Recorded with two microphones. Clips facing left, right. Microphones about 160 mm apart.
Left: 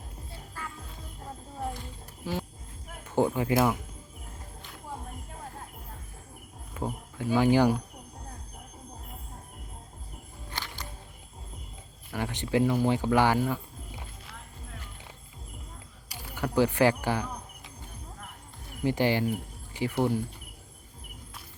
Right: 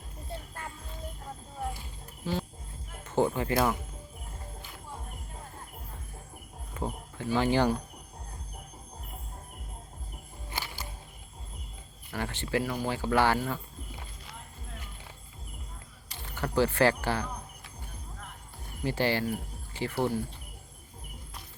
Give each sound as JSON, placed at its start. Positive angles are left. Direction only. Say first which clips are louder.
{"t": 2.3, "sound": "speech", "louder": "right 1 dB", "side_deg": 10}
{"t": 6.8, "sound": "speech", "louder": "left 2 dB", "side_deg": 10}
{"t": 10.5, "sound": "music", "louder": "right 1 dB", "side_deg": -10}
{"t": 12.1, "sound": "speech", "louder": "left 3 dB", "side_deg": 15}
{"t": 16.0, "sound": "speech", "louder": "left 2 dB", "side_deg": 10}
{"t": 18.8, "sound": "speech", "louder": "left 3 dB", "side_deg": 15}